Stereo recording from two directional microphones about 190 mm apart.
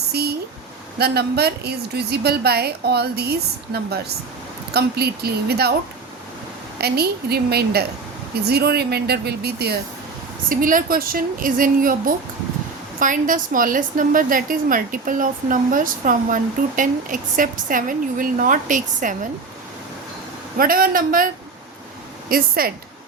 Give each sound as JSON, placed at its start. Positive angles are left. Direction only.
{"t": 0.1, "sound": "a sound", "side_deg": -55}
{"t": 0.9, "sound": "a woman's voice", "side_deg": -55}
{"t": 6.7, "sound": "a woman's voice", "side_deg": -55}
{"t": 10.5, "sound": "a woman's voice", "side_deg": -45}
{"t": 20.6, "sound": "a woman's voice", "side_deg": -50}
{"t": 22.3, "sound": "a woman's voice", "side_deg": -50}